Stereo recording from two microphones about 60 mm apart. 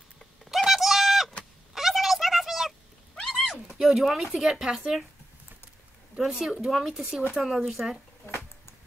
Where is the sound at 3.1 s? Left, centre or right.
Centre.